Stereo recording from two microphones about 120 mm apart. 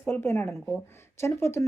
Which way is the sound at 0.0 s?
20° left (ahead or behind).